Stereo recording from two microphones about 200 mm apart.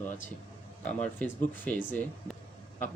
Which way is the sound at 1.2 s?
10° left (ahead or behind).